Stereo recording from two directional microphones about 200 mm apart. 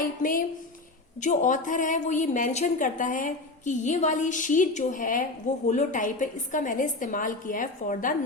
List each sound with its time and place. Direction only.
0.2 s a woman's voice: 45° left (ahead or behind)